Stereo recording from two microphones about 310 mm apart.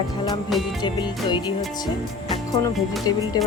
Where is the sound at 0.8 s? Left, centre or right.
Centre.